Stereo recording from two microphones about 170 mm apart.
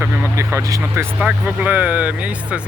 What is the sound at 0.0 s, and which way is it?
Speech, 15° right (ahead or behind).